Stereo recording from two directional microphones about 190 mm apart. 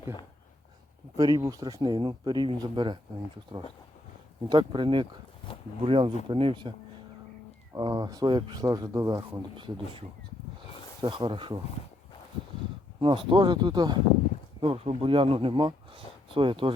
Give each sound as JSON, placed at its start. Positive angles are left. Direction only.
{"t": 1.1, "sound": "speech", "side_deg": -20}
{"t": 4.4, "sound": "speech", "side_deg": -25}
{"t": 11.0, "sound": "speech", "side_deg": -25}
{"t": 13.0, "sound": "speech", "side_deg": -25}